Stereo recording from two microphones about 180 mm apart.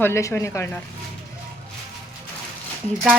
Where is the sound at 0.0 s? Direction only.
15° left (ahead or behind).